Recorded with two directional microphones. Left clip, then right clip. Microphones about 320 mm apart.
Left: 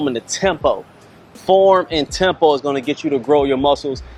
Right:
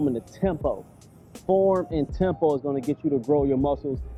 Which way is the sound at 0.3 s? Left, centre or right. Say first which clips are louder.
Left 10 dB; centre.